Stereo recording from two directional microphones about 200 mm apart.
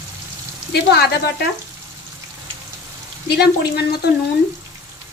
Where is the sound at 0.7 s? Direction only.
55° left (ahead or behind).